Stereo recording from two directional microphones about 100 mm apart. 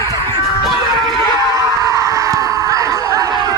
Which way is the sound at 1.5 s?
35° right (ahead or behind).